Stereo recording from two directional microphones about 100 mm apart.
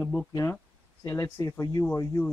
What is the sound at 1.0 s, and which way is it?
Speech, 30° left (ahead or behind).